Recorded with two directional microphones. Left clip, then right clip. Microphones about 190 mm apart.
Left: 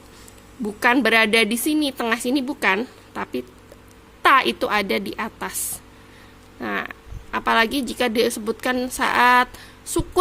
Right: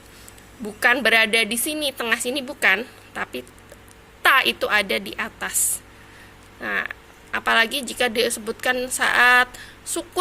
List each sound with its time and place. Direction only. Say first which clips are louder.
0.8 s a woman's voice: even; 40° left (ahead or behind)